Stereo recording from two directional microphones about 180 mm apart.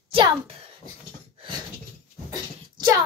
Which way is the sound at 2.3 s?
20° right (ahead or behind).